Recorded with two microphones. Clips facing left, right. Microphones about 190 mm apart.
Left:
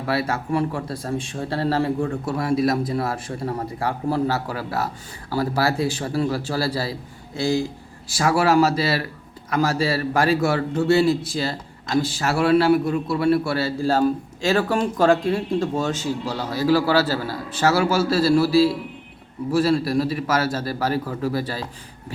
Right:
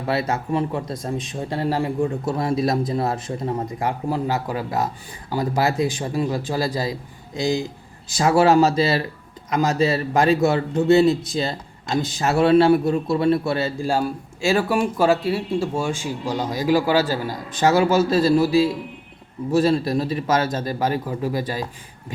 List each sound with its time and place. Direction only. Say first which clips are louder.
0.1 s a man's voice: right 1 dB; 20° right (ahead or behind)